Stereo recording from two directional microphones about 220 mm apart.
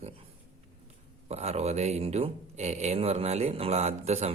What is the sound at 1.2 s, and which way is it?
Speech, 30° right (ahead or behind).